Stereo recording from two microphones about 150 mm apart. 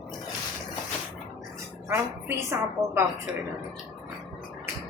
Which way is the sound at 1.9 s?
20° right (ahead or behind).